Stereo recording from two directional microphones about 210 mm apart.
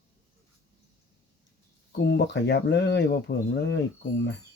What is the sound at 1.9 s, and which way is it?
Speech, 55° left (ahead or behind).